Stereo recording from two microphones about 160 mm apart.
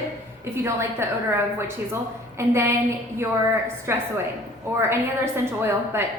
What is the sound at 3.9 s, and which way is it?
A woman's voice, 15° right (ahead or behind).